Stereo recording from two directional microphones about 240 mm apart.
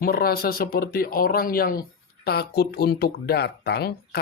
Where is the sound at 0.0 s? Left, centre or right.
Left.